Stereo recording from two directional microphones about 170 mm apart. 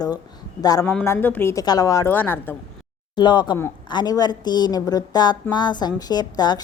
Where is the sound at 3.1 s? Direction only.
25° left (ahead or behind).